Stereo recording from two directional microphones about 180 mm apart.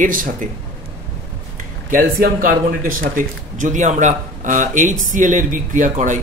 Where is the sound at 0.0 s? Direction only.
50° right (ahead or behind).